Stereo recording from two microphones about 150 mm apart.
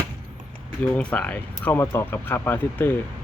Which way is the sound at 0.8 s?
10° left (ahead or behind).